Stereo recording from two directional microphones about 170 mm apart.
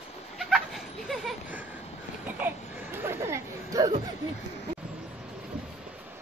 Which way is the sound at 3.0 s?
15° right (ahead or behind).